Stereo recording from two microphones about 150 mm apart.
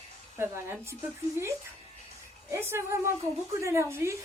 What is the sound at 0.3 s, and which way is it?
Speech, 15° right (ahead or behind).